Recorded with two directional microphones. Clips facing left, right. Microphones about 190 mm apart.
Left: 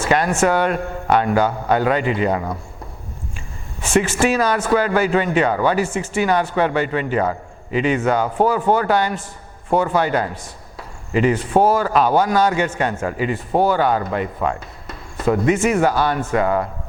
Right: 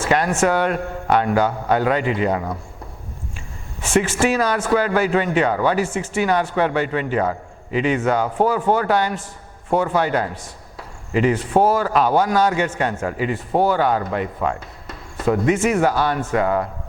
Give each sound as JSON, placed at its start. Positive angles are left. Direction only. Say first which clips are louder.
{"t": 0.0, "sound": "speech", "louder": "left 1 dB", "side_deg": 15}
{"t": 3.9, "sound": "speech", "louder": "left 1 dB", "side_deg": 10}